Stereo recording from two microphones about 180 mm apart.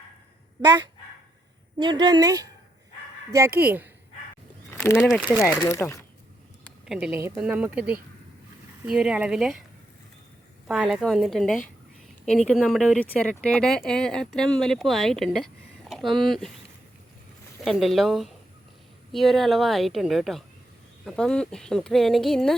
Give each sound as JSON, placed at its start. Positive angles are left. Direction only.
{"t": 1.8, "sound": "speech", "side_deg": -25}
{"t": 4.7, "sound": "speech", "side_deg": 10}
{"t": 10.7, "sound": "speech", "side_deg": 0}
{"t": 17.6, "sound": "speech", "side_deg": 0}